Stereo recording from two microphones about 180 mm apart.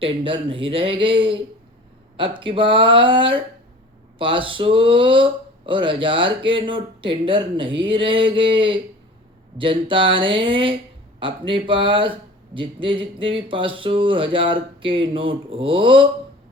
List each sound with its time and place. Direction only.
0.0 s speech: 30° right (ahead or behind)